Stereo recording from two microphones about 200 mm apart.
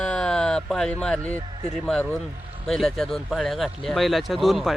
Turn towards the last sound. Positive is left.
turn(degrees=0)  # may be behind; listen again after turning